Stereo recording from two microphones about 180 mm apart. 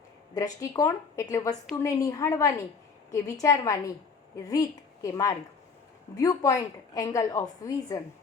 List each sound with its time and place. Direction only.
0.3 s a woman's voice: 20° left (ahead or behind)
5.0 s a woman's voice: 20° left (ahead or behind)